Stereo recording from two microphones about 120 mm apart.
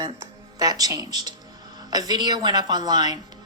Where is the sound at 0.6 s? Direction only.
30° right (ahead or behind).